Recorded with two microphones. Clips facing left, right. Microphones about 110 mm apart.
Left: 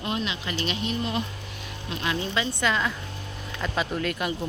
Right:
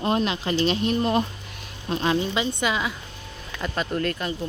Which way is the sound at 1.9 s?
35° right (ahead or behind).